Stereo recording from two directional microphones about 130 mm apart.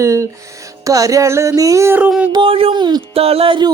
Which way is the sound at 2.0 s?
10° right (ahead or behind).